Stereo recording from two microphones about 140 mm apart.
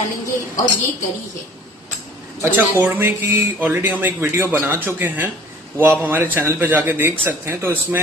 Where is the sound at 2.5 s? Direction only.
15° right (ahead or behind).